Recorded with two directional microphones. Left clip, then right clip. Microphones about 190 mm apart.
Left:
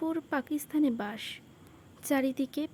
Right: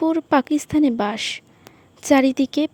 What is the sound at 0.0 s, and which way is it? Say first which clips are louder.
A woman's voice: right 14 dB; 30° right (ahead or behind).